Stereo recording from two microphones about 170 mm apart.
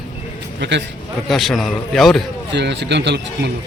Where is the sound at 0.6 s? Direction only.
90° right.